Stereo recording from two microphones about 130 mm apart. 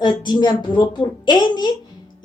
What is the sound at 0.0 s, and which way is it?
A woman's voice, 35° left (ahead or behind).